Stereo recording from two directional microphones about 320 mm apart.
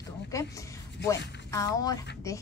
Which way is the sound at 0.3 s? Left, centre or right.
Centre.